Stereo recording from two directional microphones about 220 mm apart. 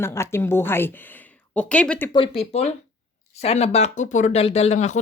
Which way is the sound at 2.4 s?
30° left (ahead or behind).